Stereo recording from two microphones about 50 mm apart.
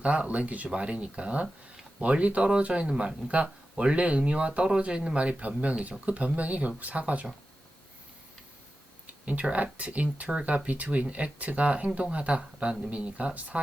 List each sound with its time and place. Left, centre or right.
0.0 s speech: right
9.2 s speech: right